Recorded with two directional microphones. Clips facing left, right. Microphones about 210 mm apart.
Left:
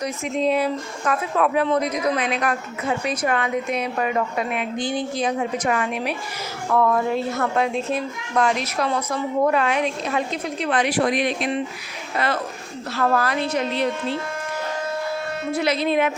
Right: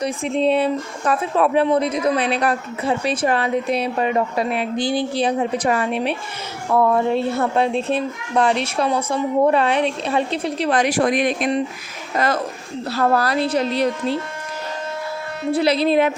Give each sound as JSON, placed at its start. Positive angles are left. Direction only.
{"t": 0.0, "sound": "a woman's voice", "side_deg": -30}
{"t": 15.5, "sound": "a woman's voice", "side_deg": -35}